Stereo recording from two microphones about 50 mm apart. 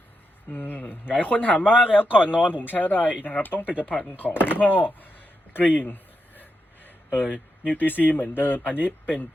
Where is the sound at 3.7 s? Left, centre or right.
Right.